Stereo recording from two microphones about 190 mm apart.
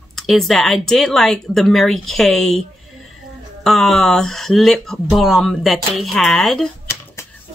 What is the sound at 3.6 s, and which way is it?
Speech, centre (ahead or behind).